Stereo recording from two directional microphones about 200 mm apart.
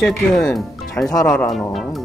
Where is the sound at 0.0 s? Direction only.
Centre (ahead or behind).